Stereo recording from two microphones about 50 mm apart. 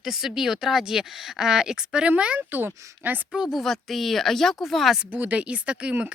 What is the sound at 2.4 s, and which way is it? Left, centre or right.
Speech, right.